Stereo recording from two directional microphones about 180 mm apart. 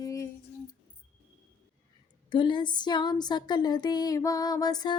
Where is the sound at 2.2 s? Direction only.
25° left (ahead or behind).